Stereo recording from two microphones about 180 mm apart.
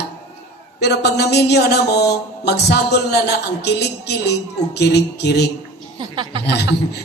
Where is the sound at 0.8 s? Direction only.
65° left (ahead or behind).